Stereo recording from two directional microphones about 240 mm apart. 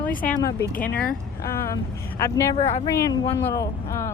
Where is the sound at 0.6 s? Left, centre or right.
Left.